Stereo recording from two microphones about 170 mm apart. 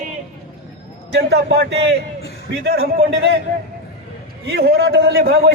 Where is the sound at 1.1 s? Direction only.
80° right.